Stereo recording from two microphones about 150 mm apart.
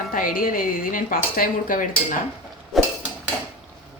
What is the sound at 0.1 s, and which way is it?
Speech, 70° left (ahead or behind).